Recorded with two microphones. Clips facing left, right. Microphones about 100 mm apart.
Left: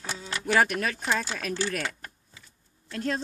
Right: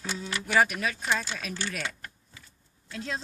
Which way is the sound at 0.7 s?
45° left (ahead or behind).